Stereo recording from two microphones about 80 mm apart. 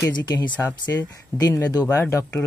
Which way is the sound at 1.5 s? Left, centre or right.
Left.